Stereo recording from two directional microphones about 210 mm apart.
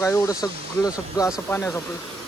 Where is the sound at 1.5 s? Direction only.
10° left (ahead or behind).